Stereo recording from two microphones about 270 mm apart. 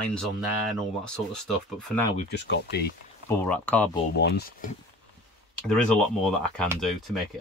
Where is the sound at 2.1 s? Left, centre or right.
Left.